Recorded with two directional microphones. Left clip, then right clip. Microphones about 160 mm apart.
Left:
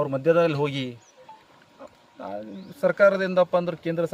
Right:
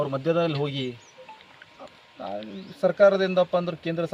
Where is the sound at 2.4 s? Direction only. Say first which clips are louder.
Even; 5° left (ahead or behind).